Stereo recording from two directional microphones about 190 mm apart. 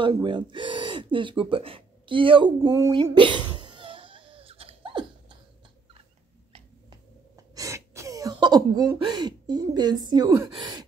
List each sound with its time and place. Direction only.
0.0 s speech: 25° right (ahead or behind)
3.0 s crying: 25° right (ahead or behind)
6.5 s a sound: 20° right (ahead or behind)
10.5 s gasp: 20° right (ahead or behind)